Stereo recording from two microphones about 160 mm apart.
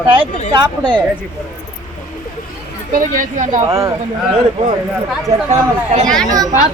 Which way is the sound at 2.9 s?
60° right (ahead or behind).